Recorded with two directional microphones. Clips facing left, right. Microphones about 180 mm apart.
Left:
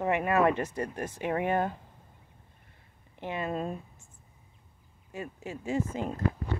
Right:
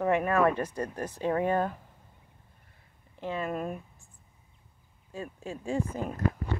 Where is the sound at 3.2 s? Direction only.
25° left (ahead or behind).